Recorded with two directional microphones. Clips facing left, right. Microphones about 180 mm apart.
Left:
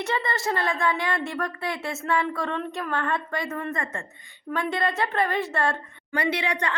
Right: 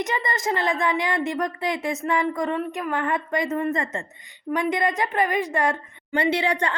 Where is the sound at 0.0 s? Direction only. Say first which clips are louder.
Right 1 dB; 15° right (ahead or behind).